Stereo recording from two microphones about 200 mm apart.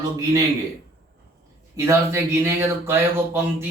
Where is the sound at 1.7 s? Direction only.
15° right (ahead or behind).